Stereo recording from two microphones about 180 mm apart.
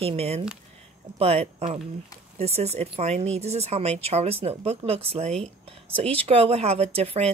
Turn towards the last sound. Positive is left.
turn(degrees=-35)  # may be behind; listen again after turning